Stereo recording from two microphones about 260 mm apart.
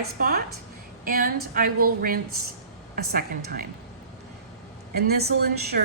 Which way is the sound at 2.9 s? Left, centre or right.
Right.